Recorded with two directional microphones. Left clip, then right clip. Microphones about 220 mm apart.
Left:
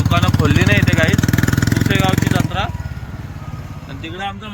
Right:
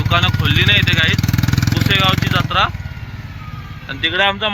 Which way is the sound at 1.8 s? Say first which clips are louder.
Right 6 dB; 10° left (ahead or behind).